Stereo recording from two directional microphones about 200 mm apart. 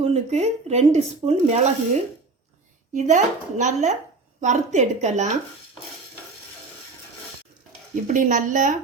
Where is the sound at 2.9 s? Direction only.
35° right (ahead or behind).